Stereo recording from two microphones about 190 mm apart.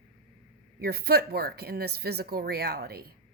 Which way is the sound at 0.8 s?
55° right (ahead or behind).